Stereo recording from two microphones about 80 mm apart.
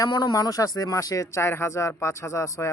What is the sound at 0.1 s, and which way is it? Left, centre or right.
Speech, left.